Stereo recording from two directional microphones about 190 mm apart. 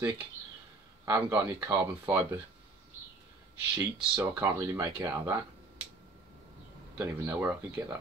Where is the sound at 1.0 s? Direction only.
15° right (ahead or behind).